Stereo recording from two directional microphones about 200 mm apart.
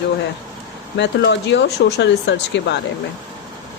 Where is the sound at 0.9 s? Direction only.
60° left (ahead or behind).